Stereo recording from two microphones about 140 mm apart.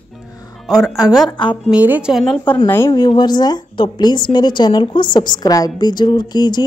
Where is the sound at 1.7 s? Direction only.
10° right (ahead or behind).